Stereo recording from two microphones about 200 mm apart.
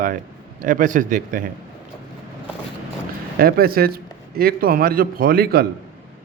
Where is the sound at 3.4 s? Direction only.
50° right (ahead or behind).